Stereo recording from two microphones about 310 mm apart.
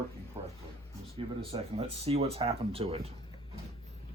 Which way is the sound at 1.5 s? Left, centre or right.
Centre.